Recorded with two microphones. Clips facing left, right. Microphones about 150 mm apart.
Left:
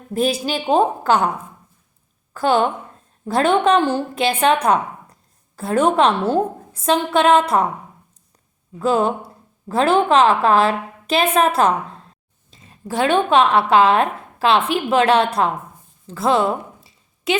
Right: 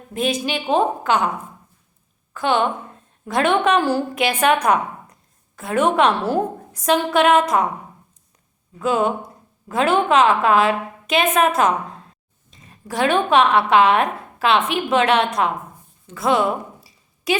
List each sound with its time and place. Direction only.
0.1 s a woman's voice: 35° left (ahead or behind)
2.3 s a woman's voice: 35° left (ahead or behind)
8.8 s a woman's voice: 35° left (ahead or behind)
16.0 s a sound: 30° left (ahead or behind)